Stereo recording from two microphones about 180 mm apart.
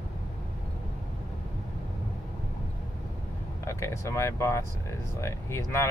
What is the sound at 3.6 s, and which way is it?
Speech, 15° left (ahead or behind).